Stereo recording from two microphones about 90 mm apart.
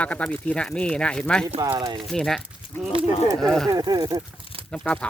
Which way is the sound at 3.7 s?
50° right (ahead or behind).